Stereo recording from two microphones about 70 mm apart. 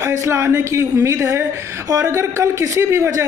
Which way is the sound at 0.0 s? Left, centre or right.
Right.